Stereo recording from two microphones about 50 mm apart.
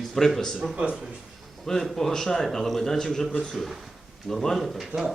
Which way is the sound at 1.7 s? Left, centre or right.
Centre.